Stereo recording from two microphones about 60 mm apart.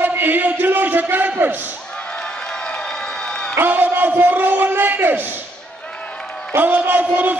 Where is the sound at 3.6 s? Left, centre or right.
Right.